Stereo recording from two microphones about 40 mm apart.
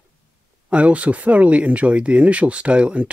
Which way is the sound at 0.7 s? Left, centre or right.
Right.